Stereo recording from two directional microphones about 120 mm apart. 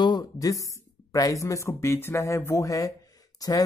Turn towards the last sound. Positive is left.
turn(degrees=30)  # may be behind; listen again after turning